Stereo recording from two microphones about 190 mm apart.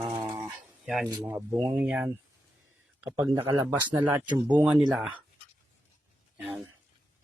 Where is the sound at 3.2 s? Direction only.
25° right (ahead or behind).